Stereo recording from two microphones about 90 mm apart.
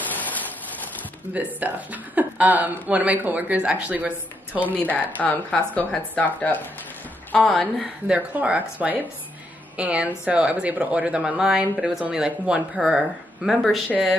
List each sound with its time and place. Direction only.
0.0 s a sound: 20° left (ahead or behind)
1.3 s speech: 15° right (ahead or behind)
4.6 s speech: 20° left (ahead or behind)
7.6 s speech: 15° right (ahead or behind)